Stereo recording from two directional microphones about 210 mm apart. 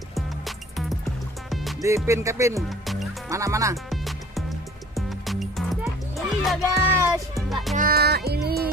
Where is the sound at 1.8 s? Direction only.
15° right (ahead or behind).